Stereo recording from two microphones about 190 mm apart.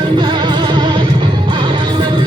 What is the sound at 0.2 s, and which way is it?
Music, 25° right (ahead or behind).